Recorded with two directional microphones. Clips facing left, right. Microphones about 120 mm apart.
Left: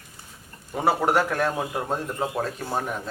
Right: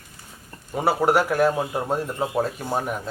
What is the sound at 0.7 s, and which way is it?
A man's voice, 5° right (ahead or behind).